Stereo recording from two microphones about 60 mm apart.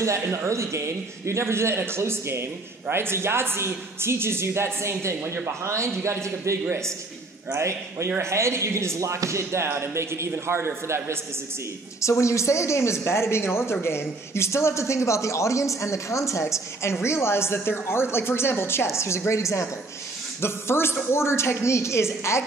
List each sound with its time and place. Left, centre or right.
0.0 s a man's voice: right
5.2 s speech: right
5.6 s a man's voice: right
7.5 s a man's voice: right
12.0 s a woman's voice: left
20.3 s a man's voice: left